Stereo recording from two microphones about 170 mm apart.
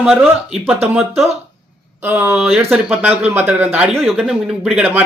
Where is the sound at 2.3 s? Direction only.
Centre (ahead or behind).